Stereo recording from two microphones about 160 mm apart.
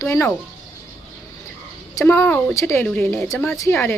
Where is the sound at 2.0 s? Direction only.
10° left (ahead or behind).